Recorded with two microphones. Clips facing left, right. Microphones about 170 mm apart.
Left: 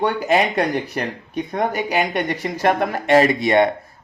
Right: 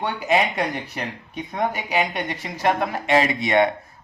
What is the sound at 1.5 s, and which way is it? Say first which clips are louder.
Speech: left 2 dB; 45° left (ahead or behind).